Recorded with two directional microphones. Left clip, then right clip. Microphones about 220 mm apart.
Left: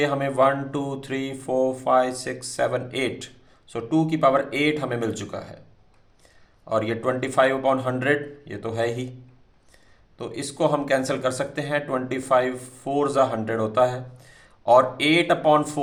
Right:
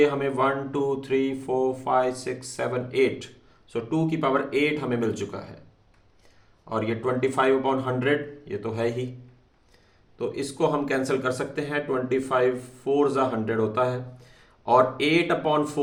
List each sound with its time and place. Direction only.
0.0 s speech: 40° left (ahead or behind)
6.7 s speech: 40° left (ahead or behind)
10.2 s speech: 40° left (ahead or behind)